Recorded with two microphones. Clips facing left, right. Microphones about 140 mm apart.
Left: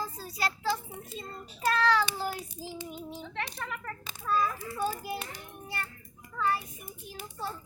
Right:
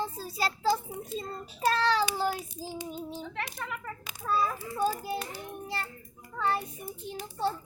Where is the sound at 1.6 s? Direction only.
30° right (ahead or behind).